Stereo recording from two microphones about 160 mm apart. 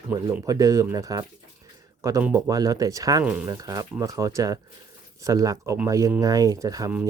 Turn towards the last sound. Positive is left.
turn(degrees=-20)  # may be behind; listen again after turning